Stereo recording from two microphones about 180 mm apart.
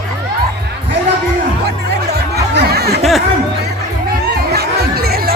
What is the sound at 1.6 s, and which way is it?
Music, 65° right (ahead or behind).